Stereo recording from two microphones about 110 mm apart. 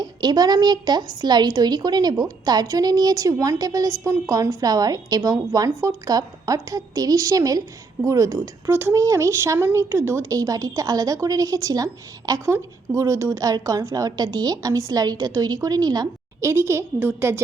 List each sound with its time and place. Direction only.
0.0 s speech: 40° right (ahead or behind)
16.4 s speech: 25° right (ahead or behind)